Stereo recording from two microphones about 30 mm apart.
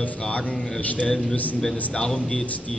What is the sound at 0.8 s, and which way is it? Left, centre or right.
Speech, left.